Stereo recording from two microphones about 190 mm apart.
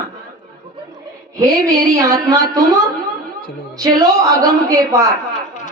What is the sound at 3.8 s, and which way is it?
A woman's voice, 20° right (ahead or behind).